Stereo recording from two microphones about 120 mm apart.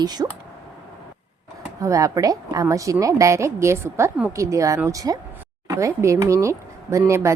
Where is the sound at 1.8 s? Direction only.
25° right (ahead or behind).